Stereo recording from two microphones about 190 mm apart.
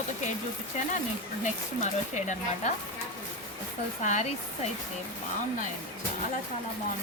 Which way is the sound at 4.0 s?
40° left (ahead or behind).